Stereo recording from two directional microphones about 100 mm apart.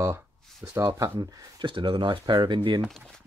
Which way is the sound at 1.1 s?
55° right (ahead or behind).